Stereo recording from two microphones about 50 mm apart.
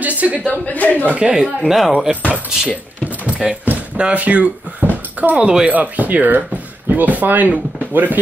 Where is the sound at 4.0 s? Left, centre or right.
Right.